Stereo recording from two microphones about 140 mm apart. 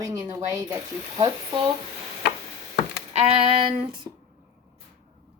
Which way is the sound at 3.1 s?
40° right (ahead or behind).